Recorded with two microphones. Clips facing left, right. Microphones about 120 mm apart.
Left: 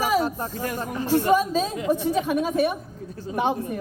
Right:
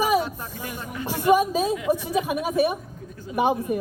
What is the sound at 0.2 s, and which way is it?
Speech, 40° left (ahead or behind).